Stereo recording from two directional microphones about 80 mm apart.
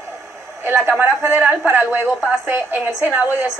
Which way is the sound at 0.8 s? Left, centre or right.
Right.